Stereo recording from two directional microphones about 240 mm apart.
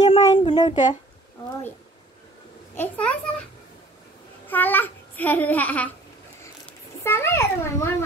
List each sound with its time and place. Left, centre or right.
0.0 s a sound: left
2.7 s a child's voice: centre
4.5 s a child's voice: centre
7.0 s a child's voice: centre